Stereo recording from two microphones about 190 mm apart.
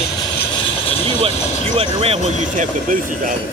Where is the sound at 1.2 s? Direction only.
30° right (ahead or behind).